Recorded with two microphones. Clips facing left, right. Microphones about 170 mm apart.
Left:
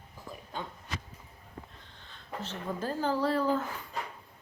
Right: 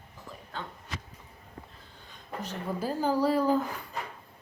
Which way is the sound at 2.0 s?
15° right (ahead or behind).